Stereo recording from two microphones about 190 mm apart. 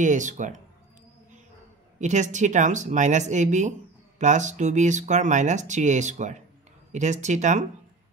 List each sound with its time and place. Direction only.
0.0 s speech: 40° right (ahead or behind)
2.0 s speech: 40° right (ahead or behind)